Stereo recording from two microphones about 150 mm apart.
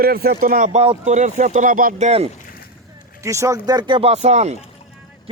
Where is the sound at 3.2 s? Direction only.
20° right (ahead or behind); by 4.6 s 45° right (ahead or behind).